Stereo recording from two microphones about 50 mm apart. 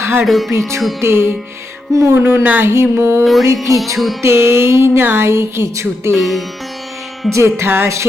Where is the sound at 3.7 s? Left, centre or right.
Right.